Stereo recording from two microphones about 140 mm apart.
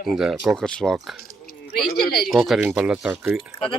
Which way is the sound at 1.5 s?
90° left.